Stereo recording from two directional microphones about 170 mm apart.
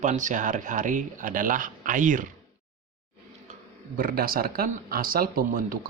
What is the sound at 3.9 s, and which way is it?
Speech, 60° right (ahead or behind).